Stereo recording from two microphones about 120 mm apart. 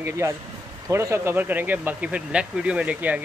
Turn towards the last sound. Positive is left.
turn(degrees=-10)  # may be behind; listen again after turning